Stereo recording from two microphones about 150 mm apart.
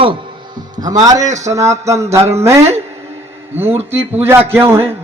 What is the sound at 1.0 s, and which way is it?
A man's voice, 25° right (ahead or behind).